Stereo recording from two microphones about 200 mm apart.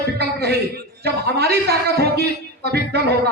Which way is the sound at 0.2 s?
55° right (ahead or behind).